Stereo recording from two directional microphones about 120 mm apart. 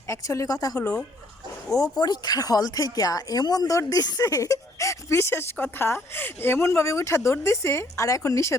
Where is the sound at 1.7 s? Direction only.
30° left (ahead or behind).